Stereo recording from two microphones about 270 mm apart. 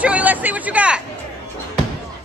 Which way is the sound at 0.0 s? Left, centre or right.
Centre.